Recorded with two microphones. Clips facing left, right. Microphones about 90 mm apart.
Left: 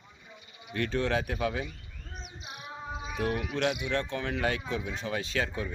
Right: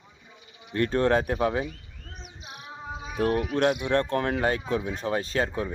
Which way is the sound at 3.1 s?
45° right (ahead or behind).